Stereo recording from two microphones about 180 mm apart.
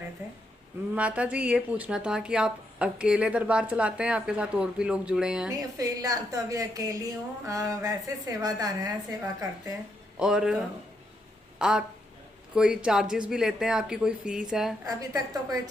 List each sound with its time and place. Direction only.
0.9 s speech: 5° right (ahead or behind)
5.5 s a woman's voice: 20° right (ahead or behind)
10.2 s speech: 5° right (ahead or behind)
11.6 s speech: 5° right (ahead or behind)
14.8 s a woman's voice: 20° right (ahead or behind)